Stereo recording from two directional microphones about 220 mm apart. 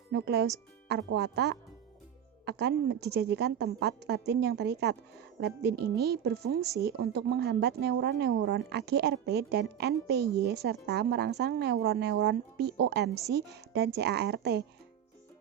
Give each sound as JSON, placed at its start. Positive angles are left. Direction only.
{"t": 0.1, "sound": "speech", "side_deg": -50}